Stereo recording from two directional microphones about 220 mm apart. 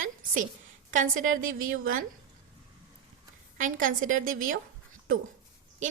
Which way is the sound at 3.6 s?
35° right (ahead or behind).